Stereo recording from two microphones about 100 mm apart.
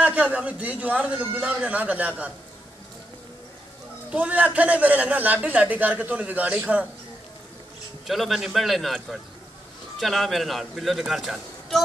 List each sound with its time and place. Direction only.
0.0 s a man's voice: 15° right (ahead or behind)
4.1 s a man's voice: 15° right (ahead or behind)
8.1 s a man's voice: centre (ahead or behind)